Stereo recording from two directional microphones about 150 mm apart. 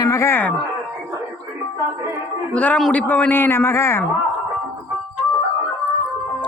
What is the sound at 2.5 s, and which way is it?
A woman's voice, 10° left (ahead or behind).